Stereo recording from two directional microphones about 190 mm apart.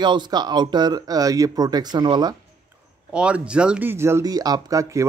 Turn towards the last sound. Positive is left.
turn(degrees=-15)  # may be behind; listen again after turning